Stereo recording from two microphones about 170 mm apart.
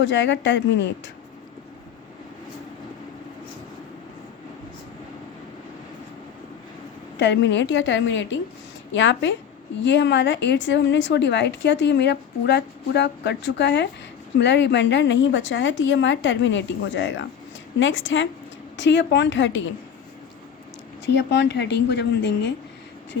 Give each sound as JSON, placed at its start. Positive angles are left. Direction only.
{"t": 0.0, "sound": "a woman's voice", "side_deg": 90}
{"t": 7.2, "sound": "a woman's voice", "side_deg": 90}
{"t": 21.1, "sound": "a woman's voice", "side_deg": 90}